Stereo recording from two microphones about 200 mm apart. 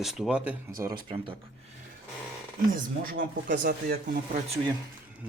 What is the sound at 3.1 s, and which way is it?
Speech, 45° right (ahead or behind).